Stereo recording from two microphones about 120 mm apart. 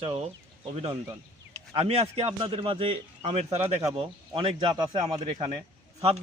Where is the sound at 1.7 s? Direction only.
60° right (ahead or behind).